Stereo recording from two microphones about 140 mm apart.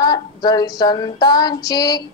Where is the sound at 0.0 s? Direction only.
30° left (ahead or behind).